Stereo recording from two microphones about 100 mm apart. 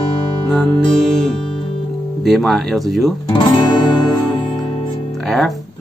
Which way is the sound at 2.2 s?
Centre (ahead or behind).